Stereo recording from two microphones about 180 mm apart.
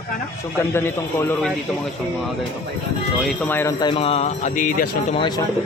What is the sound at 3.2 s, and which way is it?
Speech, 10° left (ahead or behind).